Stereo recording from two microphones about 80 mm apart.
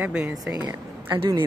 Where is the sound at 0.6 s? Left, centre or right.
Right.